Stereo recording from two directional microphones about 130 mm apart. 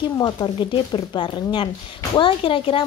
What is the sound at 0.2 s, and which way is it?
A woman's voice, 35° left (ahead or behind).